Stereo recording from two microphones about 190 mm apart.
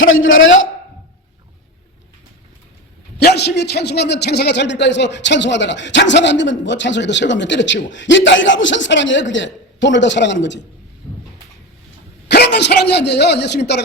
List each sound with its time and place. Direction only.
0.1 s a man's voice: 90° left
3.3 s a man's voice: 60° left (ahead or behind)
12.3 s speech: 60° left (ahead or behind)